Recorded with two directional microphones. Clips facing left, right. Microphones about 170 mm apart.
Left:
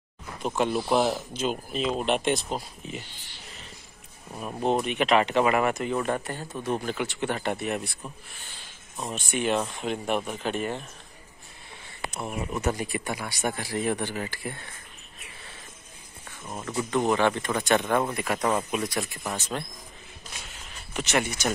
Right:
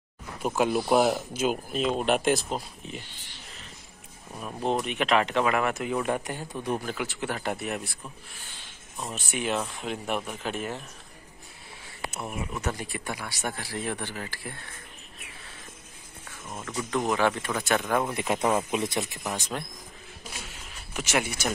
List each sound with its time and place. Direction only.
0.4 s speech: 5° right (ahead or behind)
4.3 s speech: 10° left (ahead or behind); by 6.8 s 15° right (ahead or behind)
6.8 s speech: centre (ahead or behind)
12.1 s speech: 5° left (ahead or behind)
16.4 s speech: 15° left (ahead or behind)
16.9 s speech: centre (ahead or behind)
18.1 s speech: 20° right (ahead or behind)
18.4 s speech: 10° right (ahead or behind)
18.7 s speech: 20° right (ahead or behind)
20.9 s speech: 10° right (ahead or behind)